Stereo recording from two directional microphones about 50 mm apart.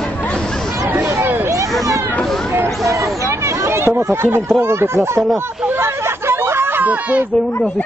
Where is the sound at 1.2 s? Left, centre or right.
Right.